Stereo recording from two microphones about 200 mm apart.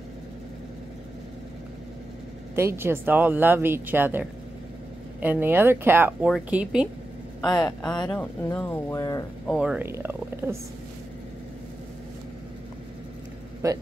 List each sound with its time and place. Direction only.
2.5 s speech: 10° right (ahead or behind)
7.4 s speech: 20° left (ahead or behind)
9.5 s speech: 5° right (ahead or behind)
13.6 s speech: 15° right (ahead or behind)